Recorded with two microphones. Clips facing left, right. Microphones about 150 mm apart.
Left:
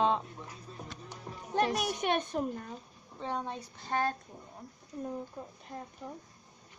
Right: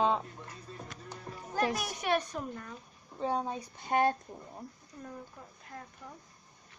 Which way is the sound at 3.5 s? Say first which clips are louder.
Right 3 dB; 15° right (ahead or behind).